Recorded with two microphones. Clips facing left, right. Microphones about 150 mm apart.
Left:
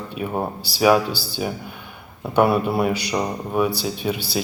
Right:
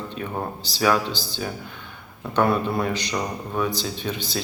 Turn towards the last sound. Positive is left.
turn(degrees=10)  # may be behind; listen again after turning